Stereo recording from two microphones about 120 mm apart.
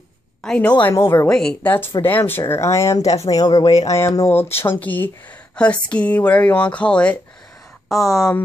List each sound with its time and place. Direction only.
0.4 s a woman's voice: 10° left (ahead or behind)
0.9 s speech: 30° left (ahead or behind)
1.2 s speech: 5° left (ahead or behind)
1.7 s speech: 20° left (ahead or behind)
3.6 s speech: 60° left (ahead or behind)
4.0 s speech: 25° left (ahead or behind); by 8.4 s 5° left (ahead or behind)